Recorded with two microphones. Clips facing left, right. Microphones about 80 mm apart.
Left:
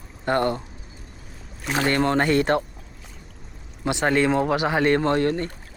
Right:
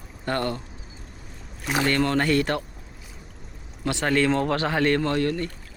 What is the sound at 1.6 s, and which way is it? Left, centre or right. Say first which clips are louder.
Speech: even; centre.